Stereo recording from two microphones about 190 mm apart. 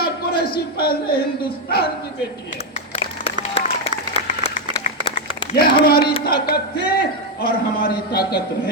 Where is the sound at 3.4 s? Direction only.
30° left (ahead or behind).